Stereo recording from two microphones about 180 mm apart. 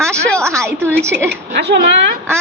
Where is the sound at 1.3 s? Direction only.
65° right (ahead or behind).